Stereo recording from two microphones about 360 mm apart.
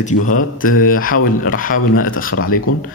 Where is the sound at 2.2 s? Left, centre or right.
Left.